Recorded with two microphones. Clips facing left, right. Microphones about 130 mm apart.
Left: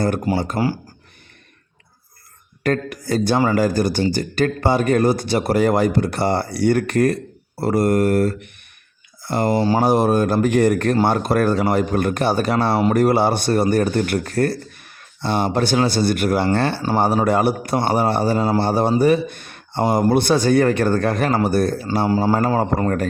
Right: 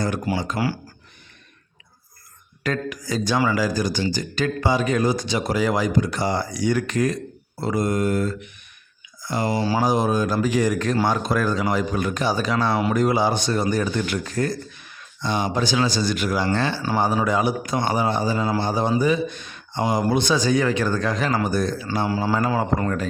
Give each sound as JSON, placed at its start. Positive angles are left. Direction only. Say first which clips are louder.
{"t": 0.0, "sound": "a man's voice", "louder": "left 4 dB", "side_deg": 50}
{"t": 2.6, "sound": "a man's voice", "louder": "left 5 dB", "side_deg": 55}
{"t": 21.8, "sound": "a man's voice", "louder": "left 5 dB", "side_deg": 45}